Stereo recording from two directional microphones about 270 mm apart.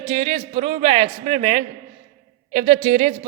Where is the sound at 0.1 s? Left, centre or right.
Right.